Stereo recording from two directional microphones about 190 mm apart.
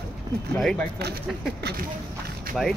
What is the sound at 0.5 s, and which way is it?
Speech, centre (ahead or behind).